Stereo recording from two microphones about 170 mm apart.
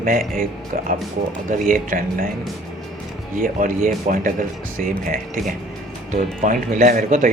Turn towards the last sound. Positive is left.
turn(degrees=-50)  # may be behind; listen again after turning